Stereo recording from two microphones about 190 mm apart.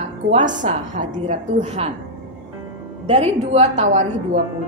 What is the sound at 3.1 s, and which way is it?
A woman's voice, 35° right (ahead or behind).